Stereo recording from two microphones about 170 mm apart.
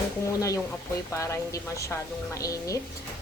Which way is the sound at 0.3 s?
20° left (ahead or behind).